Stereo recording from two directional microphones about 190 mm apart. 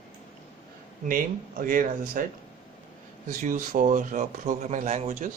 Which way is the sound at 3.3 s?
45° right (ahead or behind).